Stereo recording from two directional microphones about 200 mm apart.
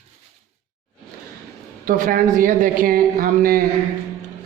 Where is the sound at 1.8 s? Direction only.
40° right (ahead or behind).